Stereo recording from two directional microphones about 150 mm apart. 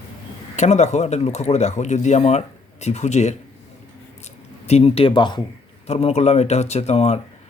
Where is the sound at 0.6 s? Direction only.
50° left (ahead or behind); by 5.4 s 30° left (ahead or behind).